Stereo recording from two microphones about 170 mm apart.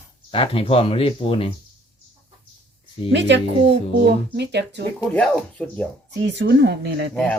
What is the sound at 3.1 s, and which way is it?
Speech, 90° right.